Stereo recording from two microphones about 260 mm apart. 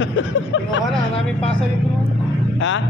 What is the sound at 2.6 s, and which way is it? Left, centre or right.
Speech, left.